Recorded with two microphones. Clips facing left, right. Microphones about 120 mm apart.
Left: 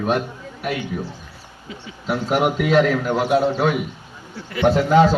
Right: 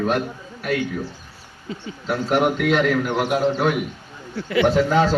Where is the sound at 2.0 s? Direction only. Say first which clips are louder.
Even; 5° left (ahead or behind).